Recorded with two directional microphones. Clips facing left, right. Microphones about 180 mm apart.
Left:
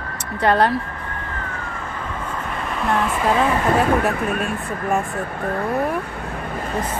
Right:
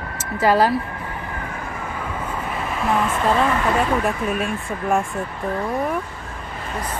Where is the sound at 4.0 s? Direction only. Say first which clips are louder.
Left 1 dB; 60° left (ahead or behind).